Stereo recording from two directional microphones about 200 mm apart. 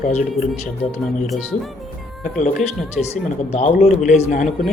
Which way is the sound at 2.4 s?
35° left (ahead or behind).